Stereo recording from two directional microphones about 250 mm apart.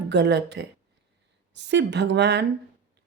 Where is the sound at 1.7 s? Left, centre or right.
Right.